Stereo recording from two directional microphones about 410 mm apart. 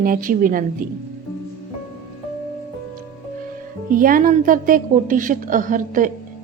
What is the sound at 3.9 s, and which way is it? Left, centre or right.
A woman's voice, centre.